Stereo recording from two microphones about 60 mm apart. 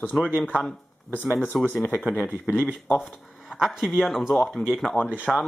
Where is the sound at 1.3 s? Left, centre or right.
Left.